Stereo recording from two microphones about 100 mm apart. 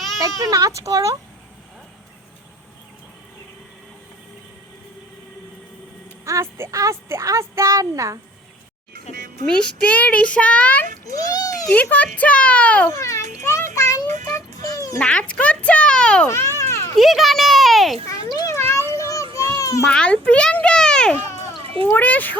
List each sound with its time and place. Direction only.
0.8 s speech: 35° right (ahead or behind)
6.2 s speech: 25° right (ahead or behind)
9.6 s a child's voice: 15° left (ahead or behind)
11.0 s a sound: 35° left (ahead or behind)
11.7 s a child's voice: 15° left (ahead or behind)
12.9 s child singing: 30° left (ahead or behind)
15.0 s a child's voice: 10° left (ahead or behind)
16.3 s children playing: 25° left (ahead or behind)
17.0 s a child's voice: centre (ahead or behind)
18.2 s children playing: 45° left (ahead or behind)
18.7 s children playing: 30° left (ahead or behind)
19.5 s a sound: 35° left (ahead or behind)
19.9 s a child's voice: 10° left (ahead or behind)